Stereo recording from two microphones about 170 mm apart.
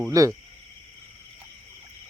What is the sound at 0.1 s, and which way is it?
Speech, 20° right (ahead or behind).